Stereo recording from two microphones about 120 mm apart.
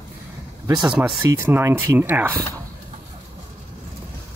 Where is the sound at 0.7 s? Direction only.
5° right (ahead or behind).